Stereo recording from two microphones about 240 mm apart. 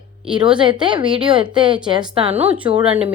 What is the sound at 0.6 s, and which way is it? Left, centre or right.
Speech, centre.